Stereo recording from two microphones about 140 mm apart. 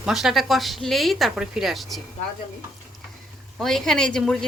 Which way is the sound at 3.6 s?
Centre (ahead or behind).